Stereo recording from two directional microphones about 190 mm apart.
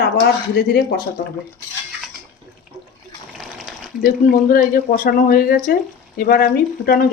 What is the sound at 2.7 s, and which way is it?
Water, centre (ahead or behind).